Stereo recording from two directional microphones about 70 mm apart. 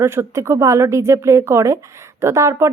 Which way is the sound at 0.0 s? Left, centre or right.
Right.